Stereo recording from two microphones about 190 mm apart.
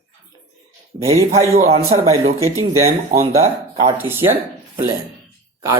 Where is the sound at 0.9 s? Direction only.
35° right (ahead or behind).